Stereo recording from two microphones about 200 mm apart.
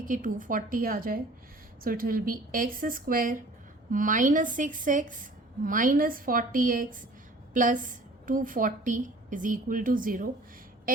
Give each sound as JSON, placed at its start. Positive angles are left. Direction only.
{"t": 0.0, "sound": "a woman's voice", "side_deg": -40}